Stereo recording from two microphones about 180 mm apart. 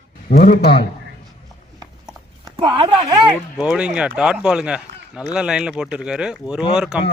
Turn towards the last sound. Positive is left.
turn(degrees=-5)  # may be behind; listen again after turning